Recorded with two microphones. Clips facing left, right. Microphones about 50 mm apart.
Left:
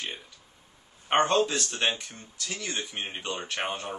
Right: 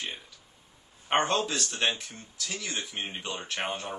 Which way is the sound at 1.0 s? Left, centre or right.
Centre.